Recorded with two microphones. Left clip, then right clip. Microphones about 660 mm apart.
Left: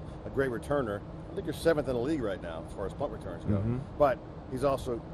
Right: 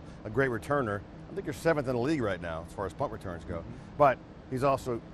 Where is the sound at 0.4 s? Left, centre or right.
Right.